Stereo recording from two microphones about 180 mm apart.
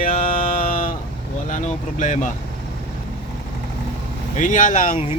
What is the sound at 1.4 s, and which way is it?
Speech, 45° left (ahead or behind).